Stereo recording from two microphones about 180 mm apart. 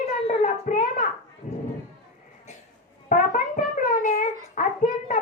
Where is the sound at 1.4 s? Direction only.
45° left (ahead or behind).